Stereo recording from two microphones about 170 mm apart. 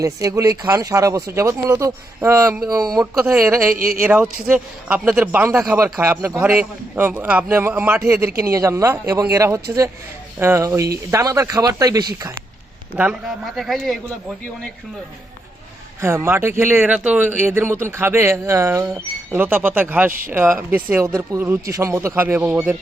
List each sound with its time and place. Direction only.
0.0 s a man's voice: 20° right (ahead or behind)
3.8 s speech: 55° right (ahead or behind)
4.0 s a man's voice: 10° right (ahead or behind)
13.0 s a man's voice: 5° right (ahead or behind)
16.0 s a man's voice: 15° right (ahead or behind)